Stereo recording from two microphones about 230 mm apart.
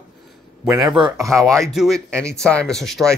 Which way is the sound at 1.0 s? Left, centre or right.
Centre.